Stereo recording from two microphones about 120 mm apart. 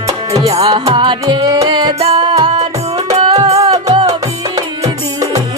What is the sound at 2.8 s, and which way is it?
Music, 60° right (ahead or behind).